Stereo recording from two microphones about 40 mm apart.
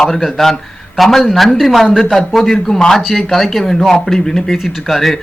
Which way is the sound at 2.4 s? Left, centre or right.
Centre.